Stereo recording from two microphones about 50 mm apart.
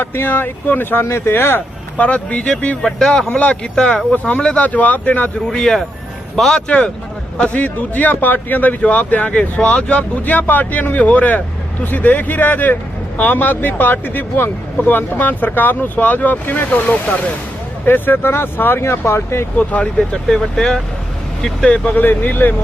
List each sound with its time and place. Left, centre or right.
0.0 s speech: left
1.0 s speech: left
2.0 s speech: left
5.5 s speech: centre
6.7 s speech: left
17.8 s speech: left
18.8 s speech: left
19.5 s speech: left
20.0 s speech: centre
21.7 s speech: left
22.0 s speech: left